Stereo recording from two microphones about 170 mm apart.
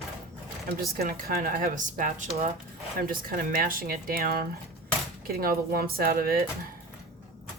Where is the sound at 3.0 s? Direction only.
55° right (ahead or behind).